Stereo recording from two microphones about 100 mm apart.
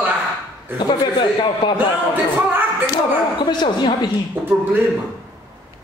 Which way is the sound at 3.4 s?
50° left (ahead or behind).